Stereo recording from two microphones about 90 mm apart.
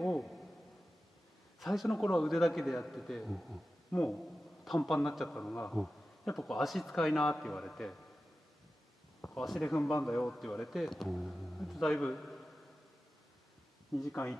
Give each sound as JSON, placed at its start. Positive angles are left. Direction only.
{"t": 0.0, "sound": "a sound", "side_deg": 10}
{"t": 1.6, "sound": "speech", "side_deg": 0}
{"t": 3.9, "sound": "a man's voice", "side_deg": 20}
{"t": 4.8, "sound": "speech", "side_deg": 5}
{"t": 5.3, "sound": "a man's voice", "side_deg": 15}
{"t": 5.7, "sound": "speech", "side_deg": 5}
{"t": 9.2, "sound": "a sound", "side_deg": 5}
{"t": 9.6, "sound": "a man's voice", "side_deg": 15}
{"t": 13.9, "sound": "speech", "side_deg": 0}